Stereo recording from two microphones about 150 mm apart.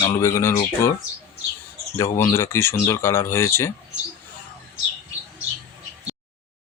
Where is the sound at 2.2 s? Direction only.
20° left (ahead or behind).